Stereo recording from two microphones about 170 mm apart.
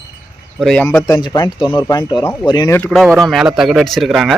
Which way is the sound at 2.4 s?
25° left (ahead or behind).